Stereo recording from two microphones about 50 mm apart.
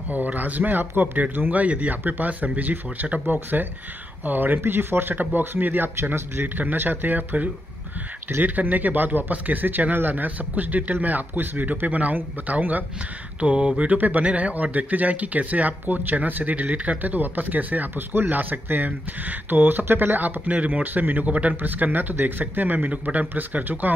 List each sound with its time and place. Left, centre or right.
0.1 s speech: right
4.6 s speech: right
5.1 s speech: right